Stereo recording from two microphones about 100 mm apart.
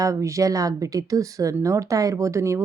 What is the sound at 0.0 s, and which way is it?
A woman's voice, 35° right (ahead or behind).